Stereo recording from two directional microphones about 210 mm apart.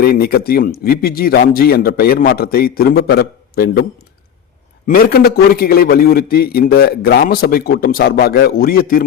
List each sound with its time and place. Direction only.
0.0 s a man's voice: 45° left (ahead or behind)
4.9 s a man's voice: 45° left (ahead or behind)